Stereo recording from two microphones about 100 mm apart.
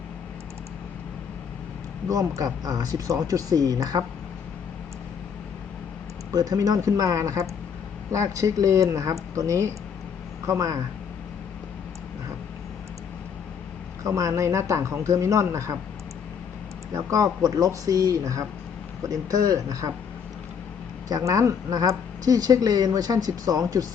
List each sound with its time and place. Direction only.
2.0 s speech: 35° right (ahead or behind)
6.3 s speech: 35° right (ahead or behind)
14.2 s speech: 30° right (ahead or behind)
16.9 s speech: 35° right (ahead or behind)
21.1 s speech: 40° right (ahead or behind)